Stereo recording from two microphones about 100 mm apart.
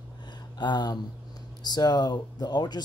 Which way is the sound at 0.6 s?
45° left (ahead or behind).